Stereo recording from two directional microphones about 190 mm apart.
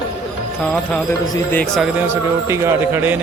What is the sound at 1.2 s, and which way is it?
Speech, 20° left (ahead or behind).